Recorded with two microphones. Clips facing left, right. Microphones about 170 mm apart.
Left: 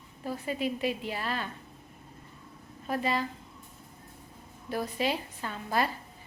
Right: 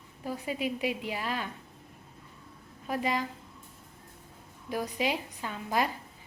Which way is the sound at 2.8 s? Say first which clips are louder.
Left 1 dB; 10° right (ahead or behind).